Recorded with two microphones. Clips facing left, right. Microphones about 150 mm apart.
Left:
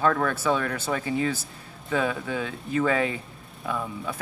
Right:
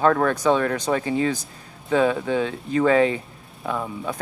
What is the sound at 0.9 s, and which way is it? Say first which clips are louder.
Speech: right 2 dB; 30° right (ahead or behind).